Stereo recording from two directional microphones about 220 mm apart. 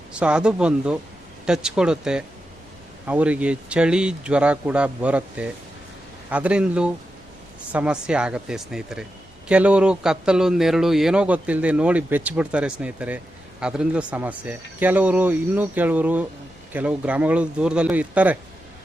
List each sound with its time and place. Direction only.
0.1 s a man's voice: 5° right (ahead or behind)